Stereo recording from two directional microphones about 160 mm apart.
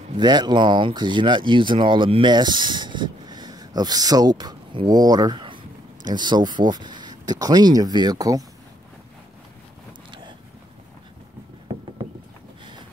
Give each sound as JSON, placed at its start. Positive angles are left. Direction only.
{"t": 0.2, "sound": "speech", "side_deg": -25}